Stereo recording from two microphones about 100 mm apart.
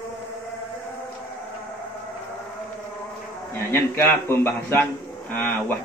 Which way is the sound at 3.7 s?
20° left (ahead or behind).